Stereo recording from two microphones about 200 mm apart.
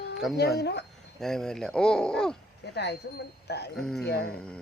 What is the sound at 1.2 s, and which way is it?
Speech, centre (ahead or behind).